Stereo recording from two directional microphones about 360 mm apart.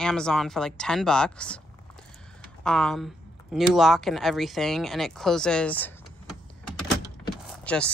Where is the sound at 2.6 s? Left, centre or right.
Centre.